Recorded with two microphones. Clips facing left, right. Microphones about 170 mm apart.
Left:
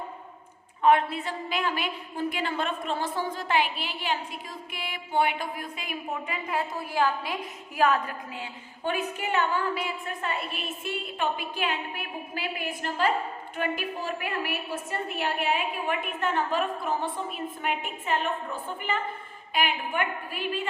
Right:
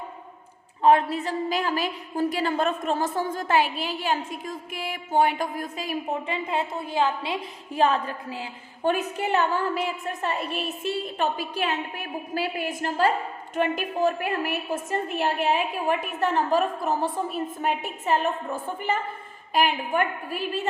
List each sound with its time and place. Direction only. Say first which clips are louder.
0.8 s a woman's voice: right 3 dB; 35° right (ahead or behind)
7.8 s a sound: right 2 dB; 30° right (ahead or behind)
8.8 s a woman's voice: right 5 dB; 40° right (ahead or behind)